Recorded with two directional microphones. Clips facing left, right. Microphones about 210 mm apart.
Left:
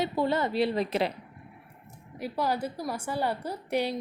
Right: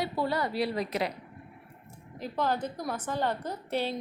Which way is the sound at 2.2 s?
10° left (ahead or behind).